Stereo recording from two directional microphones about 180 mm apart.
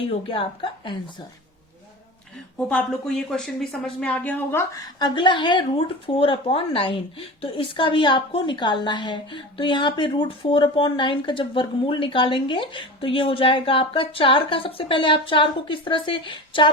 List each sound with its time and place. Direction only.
0.1 s speech: 30° left (ahead or behind)
2.6 s speech: 5° left (ahead or behind)
4.9 s speech: 25° left (ahead or behind)